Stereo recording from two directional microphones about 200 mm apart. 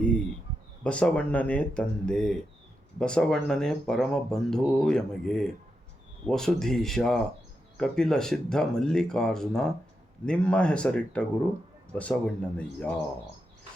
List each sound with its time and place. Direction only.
0.9 s speech: 5° left (ahead or behind)